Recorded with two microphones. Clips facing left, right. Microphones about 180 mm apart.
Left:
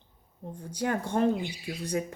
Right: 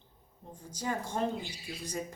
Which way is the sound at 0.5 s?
60° left (ahead or behind).